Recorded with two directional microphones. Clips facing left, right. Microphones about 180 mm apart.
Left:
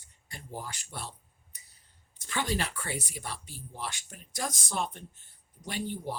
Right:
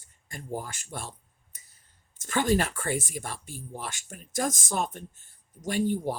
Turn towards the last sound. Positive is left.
turn(degrees=-45)  # may be behind; listen again after turning